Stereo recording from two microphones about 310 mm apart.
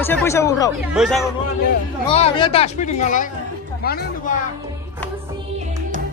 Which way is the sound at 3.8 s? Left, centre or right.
Left.